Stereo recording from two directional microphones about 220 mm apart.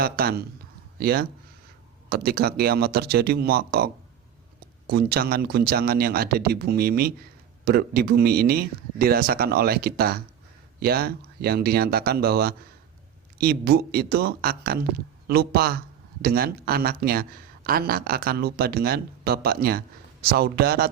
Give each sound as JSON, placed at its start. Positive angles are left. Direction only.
{"t": 0.0, "sound": "a man's voice", "side_deg": -45}